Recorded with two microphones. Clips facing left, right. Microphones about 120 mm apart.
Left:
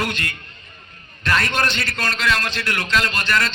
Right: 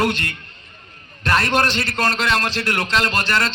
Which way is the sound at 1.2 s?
30° right (ahead or behind).